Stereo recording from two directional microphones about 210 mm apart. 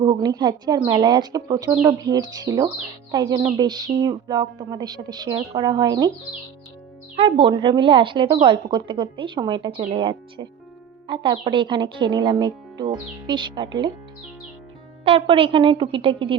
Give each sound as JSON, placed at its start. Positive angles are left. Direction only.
{"t": 0.0, "sound": "a woman's voice", "side_deg": -20}
{"t": 7.2, "sound": "a woman's voice", "side_deg": -25}
{"t": 15.0, "sound": "a woman's voice", "side_deg": -25}